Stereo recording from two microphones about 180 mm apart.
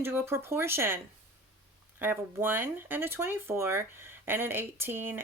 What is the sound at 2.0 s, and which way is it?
Speech, 10° right (ahead or behind).